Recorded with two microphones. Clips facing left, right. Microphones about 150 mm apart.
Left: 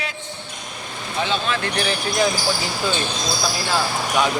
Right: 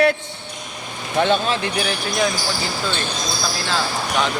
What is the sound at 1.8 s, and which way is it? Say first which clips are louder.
Speech: even; centre (ahead or behind).